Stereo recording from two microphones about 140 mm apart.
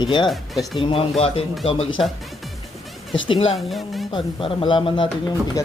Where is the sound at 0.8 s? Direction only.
40° left (ahead or behind).